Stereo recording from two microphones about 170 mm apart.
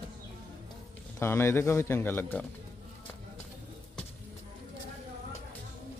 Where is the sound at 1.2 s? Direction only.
15° left (ahead or behind).